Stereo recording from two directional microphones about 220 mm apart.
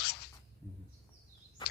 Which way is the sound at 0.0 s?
45° left (ahead or behind).